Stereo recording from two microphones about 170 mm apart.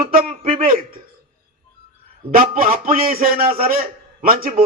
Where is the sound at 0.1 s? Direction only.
60° right (ahead or behind).